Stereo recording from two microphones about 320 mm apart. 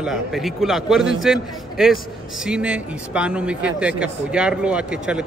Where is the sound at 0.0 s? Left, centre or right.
Centre.